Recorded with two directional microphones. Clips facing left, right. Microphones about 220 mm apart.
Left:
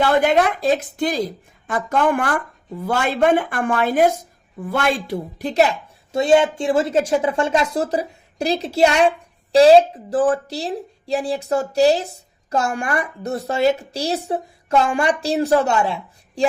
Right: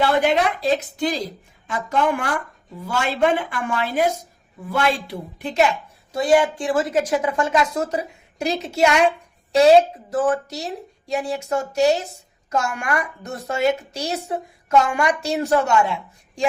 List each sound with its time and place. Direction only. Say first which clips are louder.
0.3 s a woman's voice: left 2 dB; 50° left (ahead or behind)
6.1 s a woman's voice: left 2 dB; 25° left (ahead or behind)
10.1 s a woman's voice: left 3 dB; 30° left (ahead or behind)